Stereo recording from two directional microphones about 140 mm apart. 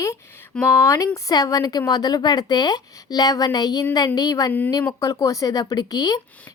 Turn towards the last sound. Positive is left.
turn(degrees=30)  # may be behind; listen again after turning